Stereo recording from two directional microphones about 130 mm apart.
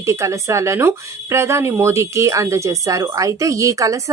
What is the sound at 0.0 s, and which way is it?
Speech, 20° right (ahead or behind).